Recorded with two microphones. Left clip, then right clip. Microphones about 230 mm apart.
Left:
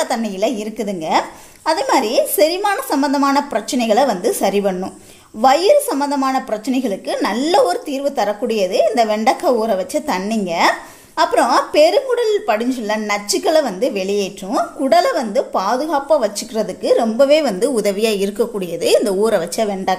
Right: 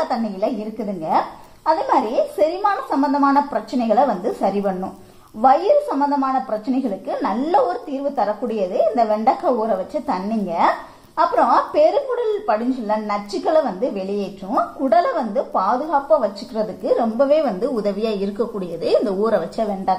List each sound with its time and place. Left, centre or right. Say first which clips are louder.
0.1 s a woman's voice: left 3 dB; left